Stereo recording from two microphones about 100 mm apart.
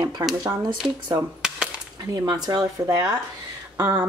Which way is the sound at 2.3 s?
45° right (ahead or behind).